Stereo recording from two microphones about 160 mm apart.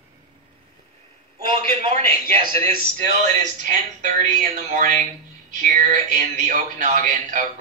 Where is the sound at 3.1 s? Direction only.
50° right (ahead or behind).